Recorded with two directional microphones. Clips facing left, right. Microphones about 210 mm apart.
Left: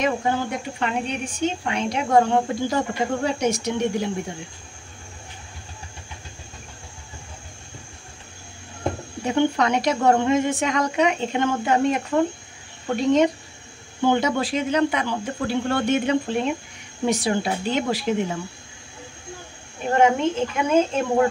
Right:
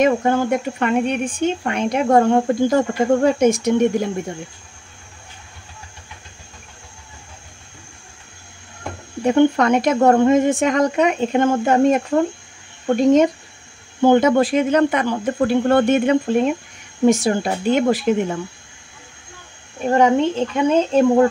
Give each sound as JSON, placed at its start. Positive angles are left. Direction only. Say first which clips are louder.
{"t": 0.0, "sound": "speech", "louder": "right 7 dB", "side_deg": -50}
{"t": 9.2, "sound": "speech", "louder": "right 6 dB", "side_deg": -50}
{"t": 20.0, "sound": "speech", "louder": "right 3 dB", "side_deg": -35}